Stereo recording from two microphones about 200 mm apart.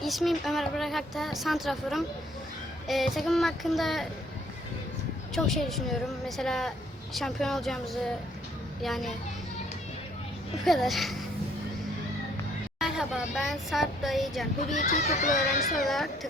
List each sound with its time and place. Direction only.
0.0 s speech: centre (ahead or behind)
5.3 s a woman's voice: centre (ahead or behind)
10.7 s speech: centre (ahead or behind)
12.8 s speech: centre (ahead or behind)
14.7 s a child's voice: 35° left (ahead or behind)
15.8 s speech: centre (ahead or behind)